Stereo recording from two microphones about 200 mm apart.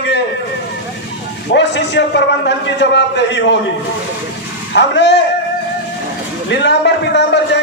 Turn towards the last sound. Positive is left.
turn(degrees=60)  # may be behind; listen again after turning